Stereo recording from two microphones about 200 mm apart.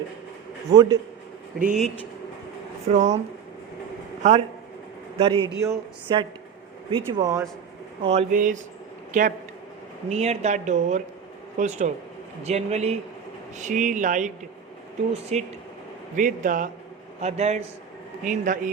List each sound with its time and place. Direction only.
0.7 s speech: 20° right (ahead or behind)
1.5 s speech: 40° right (ahead or behind)
2.8 s speech: 35° right (ahead or behind)
4.2 s a man's voice: 35° right (ahead or behind); by 7.4 s 20° right (ahead or behind)
8.0 s speech: 30° right (ahead or behind)
8.3 s speech: 40° right (ahead or behind)